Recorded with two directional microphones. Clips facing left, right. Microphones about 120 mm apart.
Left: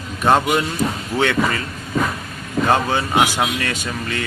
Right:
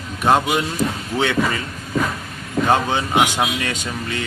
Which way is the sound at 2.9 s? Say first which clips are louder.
Even; 15° right (ahead or behind).